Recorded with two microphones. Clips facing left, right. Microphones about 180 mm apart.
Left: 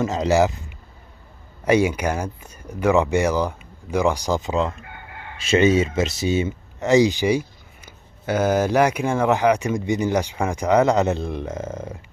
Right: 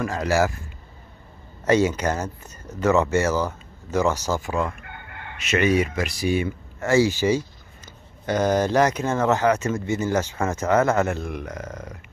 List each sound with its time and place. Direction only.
0.0 s a man's voice: 20° left (ahead or behind)